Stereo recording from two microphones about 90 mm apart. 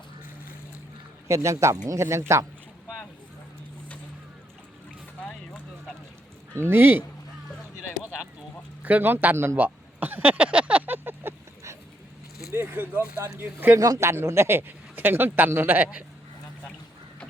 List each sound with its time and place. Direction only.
1.3 s speech: 35° right (ahead or behind)
5.2 s a sound: 10° left (ahead or behind)
6.5 s a man's voice: 25° right (ahead or behind)
8.8 s a sound: 20° right (ahead or behind)
12.5 s a man's voice: 25° right (ahead or behind)
13.7 s a man's voice: 40° right (ahead or behind); by 16.0 s 20° right (ahead or behind)